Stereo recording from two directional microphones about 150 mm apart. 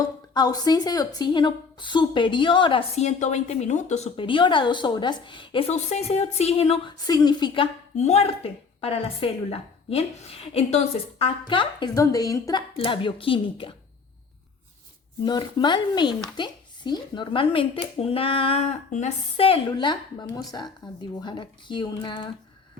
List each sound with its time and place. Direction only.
0.0 s speech: 25° left (ahead or behind); by 4.1 s 50° left (ahead or behind)
4.2 s speech: 35° left (ahead or behind)
6.9 s speech: 25° left (ahead or behind)
7.9 s speech: 45° left (ahead or behind); by 12.6 s 25° left (ahead or behind)
12.7 s speech: 35° left (ahead or behind)
15.2 s speech: 30° left (ahead or behind)